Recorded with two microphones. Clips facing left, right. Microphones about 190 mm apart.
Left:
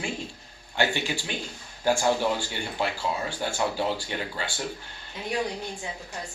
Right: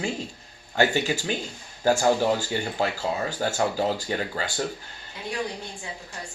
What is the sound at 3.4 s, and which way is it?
Speech, 45° right (ahead or behind).